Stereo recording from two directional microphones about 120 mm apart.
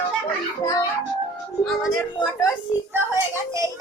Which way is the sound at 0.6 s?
30° left (ahead or behind).